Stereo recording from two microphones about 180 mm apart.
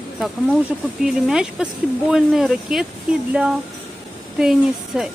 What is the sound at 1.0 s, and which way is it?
Speech, 5° right (ahead or behind).